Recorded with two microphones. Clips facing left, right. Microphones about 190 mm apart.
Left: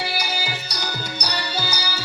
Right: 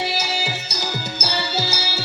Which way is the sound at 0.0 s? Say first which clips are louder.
Right 3 dB; 25° right (ahead or behind).